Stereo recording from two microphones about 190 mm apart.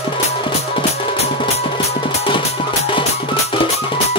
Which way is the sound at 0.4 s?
30° left (ahead or behind).